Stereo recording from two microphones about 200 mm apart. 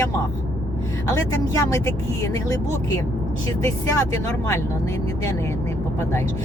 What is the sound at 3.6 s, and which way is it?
Speech, 15° left (ahead or behind).